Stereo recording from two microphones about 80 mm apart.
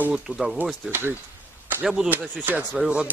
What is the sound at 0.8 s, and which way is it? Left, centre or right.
Speech, right.